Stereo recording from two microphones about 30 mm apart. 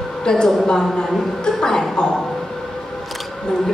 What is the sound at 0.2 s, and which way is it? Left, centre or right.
A woman's voice, left.